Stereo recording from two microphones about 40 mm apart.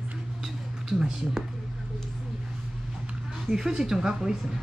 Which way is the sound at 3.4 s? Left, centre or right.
Centre.